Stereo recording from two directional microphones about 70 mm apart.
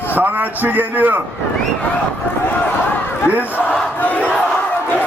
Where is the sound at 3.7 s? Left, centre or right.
Left.